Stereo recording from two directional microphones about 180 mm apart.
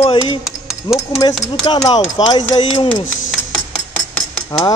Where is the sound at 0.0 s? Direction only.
25° left (ahead or behind).